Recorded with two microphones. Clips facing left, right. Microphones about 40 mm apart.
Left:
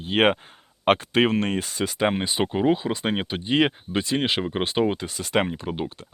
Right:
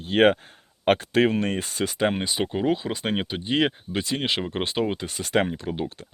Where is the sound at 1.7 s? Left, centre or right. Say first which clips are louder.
Even; centre.